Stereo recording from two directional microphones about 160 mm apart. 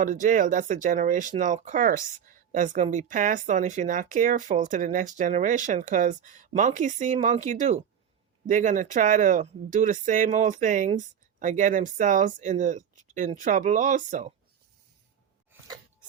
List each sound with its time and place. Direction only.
0.0 s speech: 55° right (ahead or behind)